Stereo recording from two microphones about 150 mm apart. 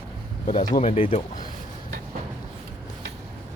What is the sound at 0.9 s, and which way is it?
Speech, 40° left (ahead or behind).